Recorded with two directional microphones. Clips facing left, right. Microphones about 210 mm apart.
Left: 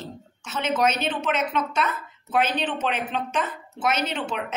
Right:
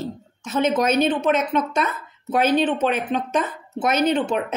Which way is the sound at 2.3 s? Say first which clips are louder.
Right 6 dB; 45° right (ahead or behind).